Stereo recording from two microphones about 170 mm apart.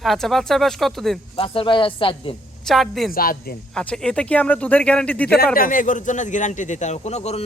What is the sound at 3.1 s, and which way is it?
Speech, 60° left (ahead or behind).